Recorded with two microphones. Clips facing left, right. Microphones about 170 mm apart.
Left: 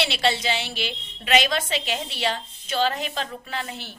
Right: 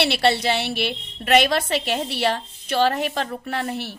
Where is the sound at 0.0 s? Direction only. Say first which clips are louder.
Right 4 dB; 60° right (ahead or behind).